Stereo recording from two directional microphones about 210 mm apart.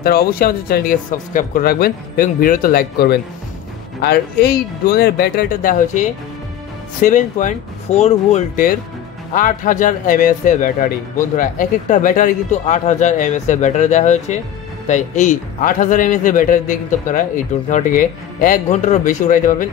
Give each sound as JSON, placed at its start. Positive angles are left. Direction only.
{"t": 0.0, "sound": "a man's voice", "side_deg": 45}